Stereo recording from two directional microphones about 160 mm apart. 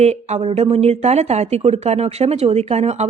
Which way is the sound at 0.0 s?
45° right (ahead or behind).